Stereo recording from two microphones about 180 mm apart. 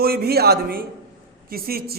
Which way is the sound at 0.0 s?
60° right (ahead or behind).